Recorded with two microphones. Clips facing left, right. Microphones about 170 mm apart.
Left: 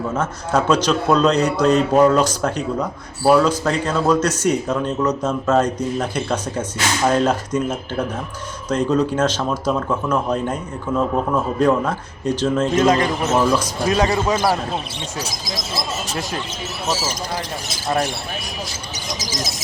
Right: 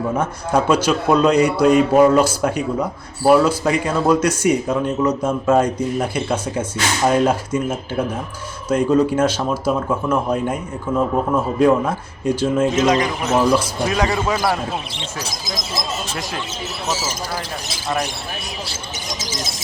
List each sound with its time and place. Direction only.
0.2 s speech: 10° right (ahead or behind)
14.0 s a man's voice: 20° left (ahead or behind)
19.2 s speech: 25° right (ahead or behind)